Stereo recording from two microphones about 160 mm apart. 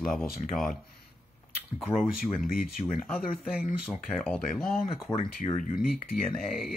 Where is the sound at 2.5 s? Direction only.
65° left (ahead or behind).